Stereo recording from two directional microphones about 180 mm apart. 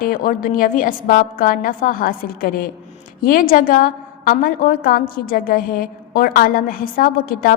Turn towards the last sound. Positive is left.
turn(degrees=50)  # may be behind; listen again after turning